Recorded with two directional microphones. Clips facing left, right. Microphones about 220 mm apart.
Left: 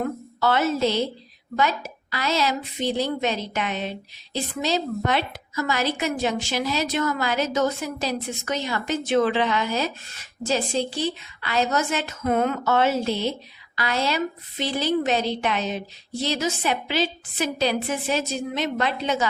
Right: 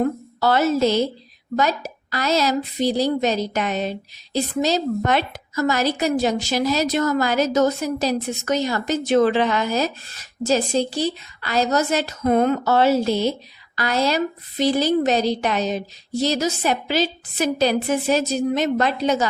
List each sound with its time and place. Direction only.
0.0 s a woman's voice: 40° right (ahead or behind)